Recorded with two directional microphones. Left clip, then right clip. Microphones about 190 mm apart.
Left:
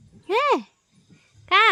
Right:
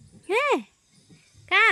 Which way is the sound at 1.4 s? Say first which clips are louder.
Left 2 dB; 15° left (ahead or behind).